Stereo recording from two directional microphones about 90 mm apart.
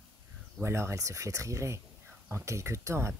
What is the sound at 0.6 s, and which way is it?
Speech, 30° right (ahead or behind).